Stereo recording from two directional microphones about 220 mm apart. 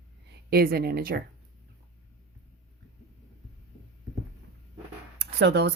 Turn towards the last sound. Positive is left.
turn(degrees=-50)  # may be behind; listen again after turning